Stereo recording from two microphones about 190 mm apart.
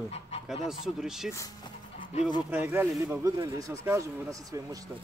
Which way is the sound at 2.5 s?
10° right (ahead or behind).